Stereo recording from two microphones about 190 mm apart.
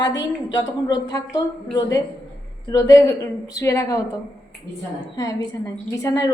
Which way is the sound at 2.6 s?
20° left (ahead or behind).